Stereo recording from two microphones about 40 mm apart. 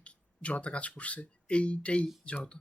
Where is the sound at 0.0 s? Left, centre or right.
Left.